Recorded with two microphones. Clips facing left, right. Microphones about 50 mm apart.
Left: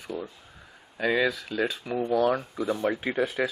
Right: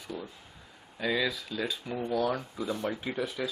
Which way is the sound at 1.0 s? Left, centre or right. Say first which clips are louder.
Left 5 dB; left.